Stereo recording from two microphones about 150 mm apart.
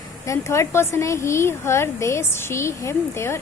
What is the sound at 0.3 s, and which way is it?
A woman's voice, 20° left (ahead or behind).